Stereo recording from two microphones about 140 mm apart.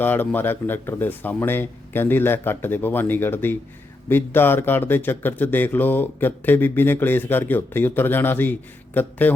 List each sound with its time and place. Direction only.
0.0 s speech: 15° left (ahead or behind)